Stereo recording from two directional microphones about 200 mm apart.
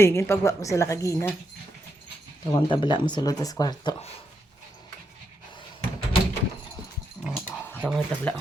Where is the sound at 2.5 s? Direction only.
25° left (ahead or behind).